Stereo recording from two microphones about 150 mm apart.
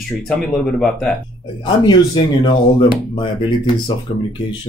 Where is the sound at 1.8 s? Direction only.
30° left (ahead or behind).